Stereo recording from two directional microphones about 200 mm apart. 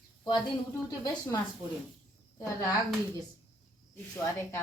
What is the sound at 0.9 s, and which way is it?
Speech, 20° left (ahead or behind).